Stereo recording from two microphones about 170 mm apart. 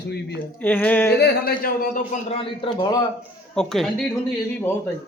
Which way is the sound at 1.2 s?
60° left (ahead or behind).